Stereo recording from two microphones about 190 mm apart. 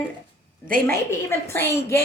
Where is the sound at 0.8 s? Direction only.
15° left (ahead or behind).